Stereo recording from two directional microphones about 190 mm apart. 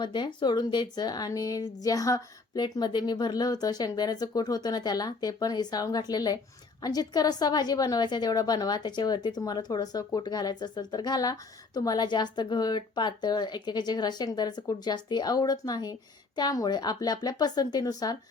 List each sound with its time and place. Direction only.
0.0 s a woman's voice: 25° left (ahead or behind)